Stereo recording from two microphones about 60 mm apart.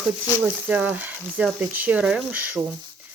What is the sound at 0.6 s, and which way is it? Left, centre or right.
Speech, right.